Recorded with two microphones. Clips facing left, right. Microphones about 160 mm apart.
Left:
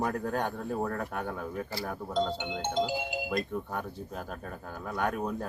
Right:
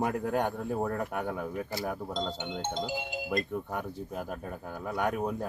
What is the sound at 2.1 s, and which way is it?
Music, 10° left (ahead or behind).